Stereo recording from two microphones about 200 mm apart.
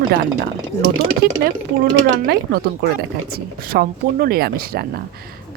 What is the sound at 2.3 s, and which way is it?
Speech, 50° right (ahead or behind).